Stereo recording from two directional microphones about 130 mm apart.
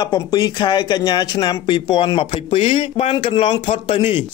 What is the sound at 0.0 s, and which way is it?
A man's voice, 30° left (ahead or behind).